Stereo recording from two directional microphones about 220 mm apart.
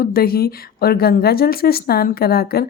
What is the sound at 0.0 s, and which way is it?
A woman's voice, 45° left (ahead or behind).